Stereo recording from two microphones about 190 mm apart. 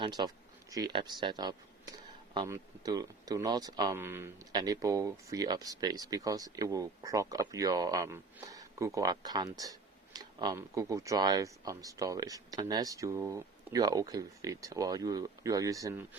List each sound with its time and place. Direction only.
0.0 s speech: 20° right (ahead or behind)